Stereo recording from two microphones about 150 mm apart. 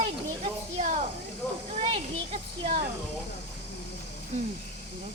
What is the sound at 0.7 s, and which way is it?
Snake, 60° right (ahead or behind).